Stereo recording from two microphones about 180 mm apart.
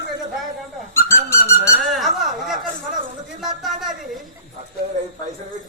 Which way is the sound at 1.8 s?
Centre (ahead or behind).